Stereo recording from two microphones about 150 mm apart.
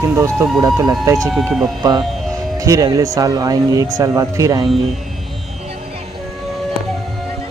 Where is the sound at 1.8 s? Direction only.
25° right (ahead or behind).